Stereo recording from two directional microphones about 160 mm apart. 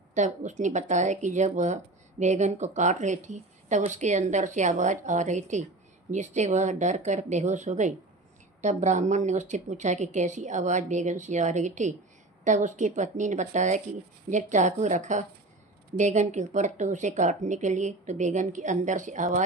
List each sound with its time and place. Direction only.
0.1 s speech: 50° right (ahead or behind)